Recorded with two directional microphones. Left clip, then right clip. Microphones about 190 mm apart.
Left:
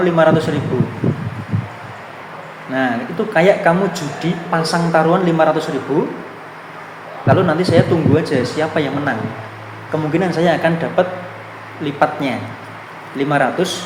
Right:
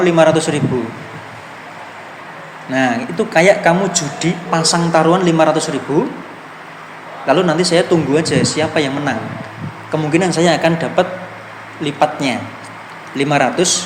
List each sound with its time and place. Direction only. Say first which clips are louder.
0.0 s speech: right 2 dB; 35° right (ahead or behind)
2.7 s speech: right 3 dB; 35° right (ahead or behind)
7.3 s speech: right 1 dB; 35° right (ahead or behind)